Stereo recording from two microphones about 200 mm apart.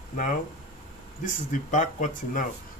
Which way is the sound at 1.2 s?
40° left (ahead or behind).